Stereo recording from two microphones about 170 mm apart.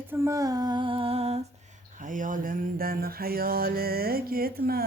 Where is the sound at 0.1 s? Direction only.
20° right (ahead or behind); by 1.4 s 35° right (ahead or behind).